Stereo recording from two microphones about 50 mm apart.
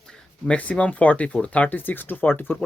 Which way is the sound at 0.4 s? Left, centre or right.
Left.